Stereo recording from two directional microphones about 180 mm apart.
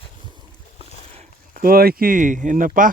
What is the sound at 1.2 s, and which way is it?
Speech, 50° right (ahead or behind).